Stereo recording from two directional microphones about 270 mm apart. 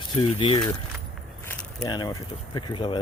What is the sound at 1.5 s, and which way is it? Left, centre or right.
Keys jangling, centre.